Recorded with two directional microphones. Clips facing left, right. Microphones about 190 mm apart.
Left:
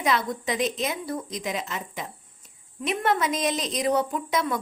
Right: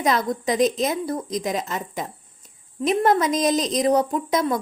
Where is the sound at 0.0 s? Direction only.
40° right (ahead or behind).